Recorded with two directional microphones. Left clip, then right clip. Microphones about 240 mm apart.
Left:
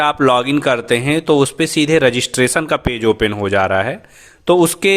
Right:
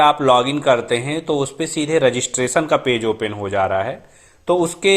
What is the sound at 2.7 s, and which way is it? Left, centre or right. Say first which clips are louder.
A man's voice: left 2 dB; left.